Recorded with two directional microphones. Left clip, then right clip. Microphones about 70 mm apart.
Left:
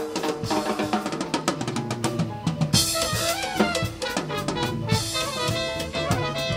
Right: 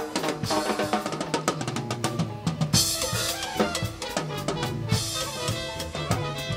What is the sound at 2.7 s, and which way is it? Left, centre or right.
Drum kit, centre.